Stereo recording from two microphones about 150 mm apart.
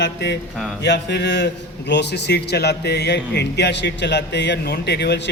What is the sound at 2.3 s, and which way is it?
Speech, 90° left.